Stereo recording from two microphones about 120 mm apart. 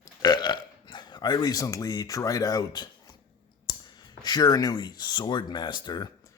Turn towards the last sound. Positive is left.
turn(degrees=35)  # may be behind; listen again after turning